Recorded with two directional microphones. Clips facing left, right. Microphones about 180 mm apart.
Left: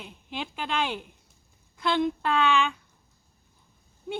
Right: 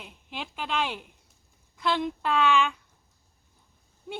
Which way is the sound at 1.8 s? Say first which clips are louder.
Left 2 dB; centre (ahead or behind).